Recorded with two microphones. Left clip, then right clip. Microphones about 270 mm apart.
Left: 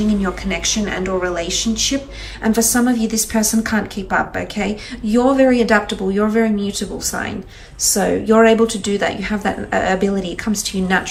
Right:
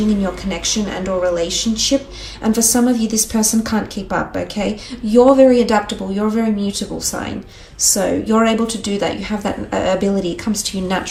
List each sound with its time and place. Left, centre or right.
0.1 s a woman's voice: centre